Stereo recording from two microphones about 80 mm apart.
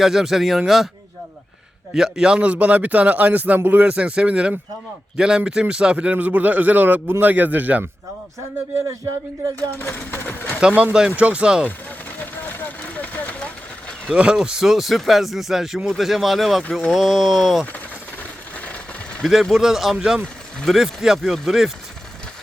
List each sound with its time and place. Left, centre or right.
0.0 s speech: centre
1.9 s a man's voice: centre
9.7 s speech: left
10.6 s a man's voice: centre
12.2 s vehicle: left
14.1 s speech: centre
18.2 s a sound: centre
19.2 s speech: centre
20.2 s speech: centre
20.7 s speech: centre